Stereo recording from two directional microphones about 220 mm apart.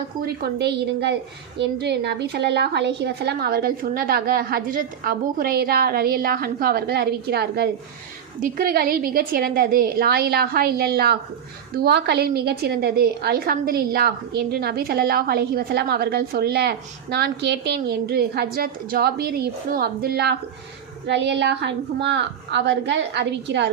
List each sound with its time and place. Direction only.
0.4 s a woman's voice: 50° right (ahead or behind)